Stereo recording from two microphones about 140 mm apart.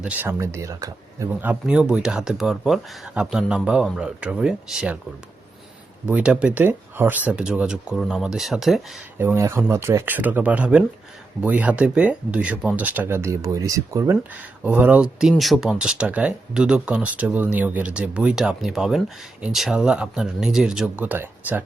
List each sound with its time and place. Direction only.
0.0 s speech: 10° right (ahead or behind)
1.4 s speech: 10° right (ahead or behind)
6.1 s speech: 10° right (ahead or behind)
9.1 s speech: 15° right (ahead or behind)